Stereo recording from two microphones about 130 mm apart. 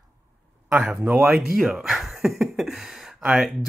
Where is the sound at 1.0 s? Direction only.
15° right (ahead or behind).